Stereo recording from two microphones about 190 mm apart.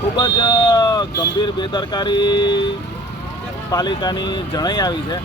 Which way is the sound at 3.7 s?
20° left (ahead or behind).